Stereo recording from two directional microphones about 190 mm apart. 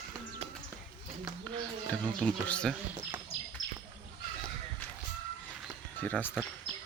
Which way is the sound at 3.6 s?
90° left.